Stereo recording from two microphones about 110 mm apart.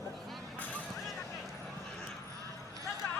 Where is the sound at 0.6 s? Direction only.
15° left (ahead or behind).